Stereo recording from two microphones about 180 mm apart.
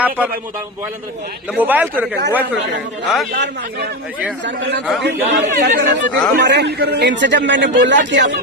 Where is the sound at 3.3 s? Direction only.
75° right (ahead or behind).